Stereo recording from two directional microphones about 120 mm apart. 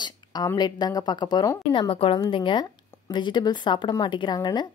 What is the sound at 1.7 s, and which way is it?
A woman's voice, 50° left (ahead or behind).